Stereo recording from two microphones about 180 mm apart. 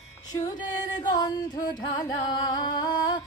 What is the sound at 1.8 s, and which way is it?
Music, 25° left (ahead or behind).